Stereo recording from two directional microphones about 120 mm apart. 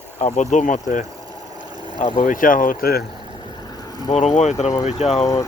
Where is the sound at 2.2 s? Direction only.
90° left.